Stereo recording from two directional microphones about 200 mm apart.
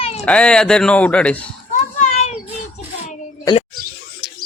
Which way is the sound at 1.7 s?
35° left (ahead or behind).